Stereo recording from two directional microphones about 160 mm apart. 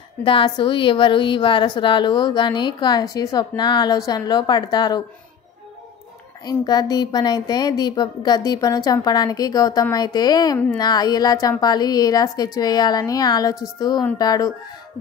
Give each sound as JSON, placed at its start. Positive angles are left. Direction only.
{"t": 0.2, "sound": "a woman's voice", "side_deg": 30}
{"t": 6.4, "sound": "a woman's voice", "side_deg": 25}